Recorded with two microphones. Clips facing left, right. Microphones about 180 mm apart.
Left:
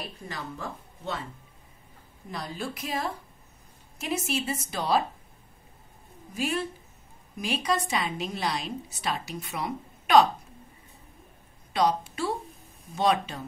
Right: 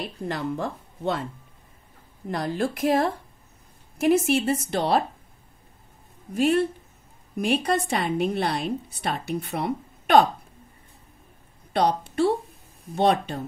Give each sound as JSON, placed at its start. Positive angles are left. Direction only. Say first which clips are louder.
{"t": 0.3, "sound": "a woman's voice", "louder": "right 10 dB", "side_deg": -55}
{"t": 2.3, "sound": "a woman's voice", "louder": "right 9 dB", "side_deg": -55}
{"t": 6.3, "sound": "a woman's voice", "louder": "right 9 dB", "side_deg": -60}
{"t": 11.7, "sound": "a woman's voice", "louder": "right 3 dB", "side_deg": -60}